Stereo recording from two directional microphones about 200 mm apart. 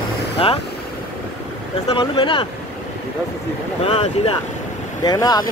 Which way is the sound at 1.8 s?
25° left (ahead or behind).